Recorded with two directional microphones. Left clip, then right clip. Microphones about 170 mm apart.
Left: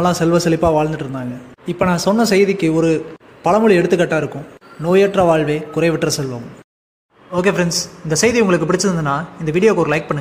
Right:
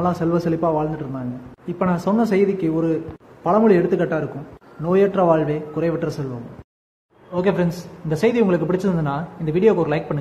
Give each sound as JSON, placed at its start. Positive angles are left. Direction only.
{"t": 0.0, "sound": "a man's voice", "side_deg": 25}
{"t": 7.3, "sound": "a man's voice", "side_deg": 15}